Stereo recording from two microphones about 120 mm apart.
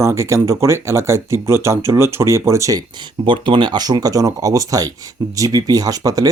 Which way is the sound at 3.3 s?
45° right (ahead or behind).